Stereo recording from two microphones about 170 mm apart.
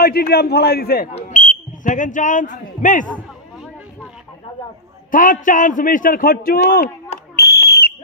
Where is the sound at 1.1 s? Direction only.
45° left (ahead or behind).